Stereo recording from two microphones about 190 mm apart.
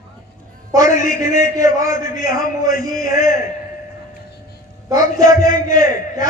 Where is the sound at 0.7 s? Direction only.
15° right (ahead or behind).